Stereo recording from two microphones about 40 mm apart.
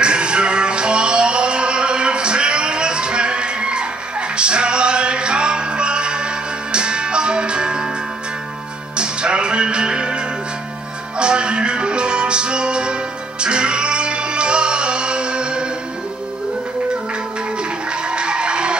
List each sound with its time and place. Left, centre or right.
0.0 s music: right
8.9 s music: right
18.0 s music: right